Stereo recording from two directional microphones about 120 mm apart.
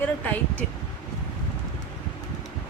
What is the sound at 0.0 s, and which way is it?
Speech, 15° left (ahead or behind).